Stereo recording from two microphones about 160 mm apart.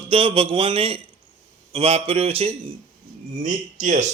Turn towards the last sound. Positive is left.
turn(degrees=-50)  # may be behind; listen again after turning